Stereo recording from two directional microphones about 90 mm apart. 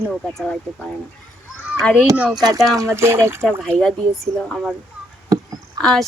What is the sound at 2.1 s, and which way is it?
Speech, 15° right (ahead or behind).